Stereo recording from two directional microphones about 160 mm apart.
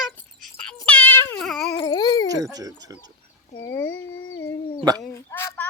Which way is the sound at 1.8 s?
25° left (ahead or behind).